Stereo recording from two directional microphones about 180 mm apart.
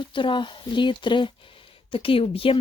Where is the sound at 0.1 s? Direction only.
25° left (ahead or behind).